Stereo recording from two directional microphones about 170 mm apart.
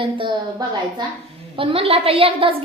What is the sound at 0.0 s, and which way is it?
Speech, 30° right (ahead or behind).